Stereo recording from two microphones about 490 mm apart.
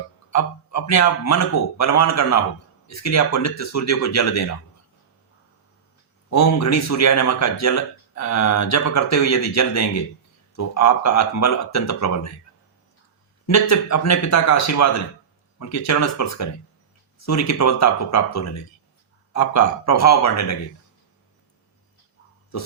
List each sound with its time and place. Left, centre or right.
0.3 s speech: left
6.3 s speech: left
13.5 s speech: left